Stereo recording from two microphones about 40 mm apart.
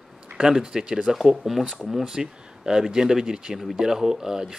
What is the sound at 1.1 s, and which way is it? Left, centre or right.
Speech, centre.